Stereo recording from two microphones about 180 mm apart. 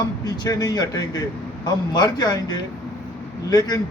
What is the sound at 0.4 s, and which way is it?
A man's voice, 20° left (ahead or behind).